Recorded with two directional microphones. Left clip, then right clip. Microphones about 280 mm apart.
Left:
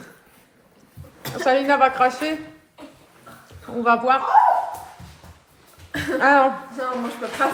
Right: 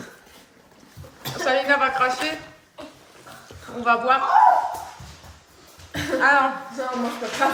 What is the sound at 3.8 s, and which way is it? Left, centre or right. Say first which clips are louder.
Speech: left 1 dB; centre.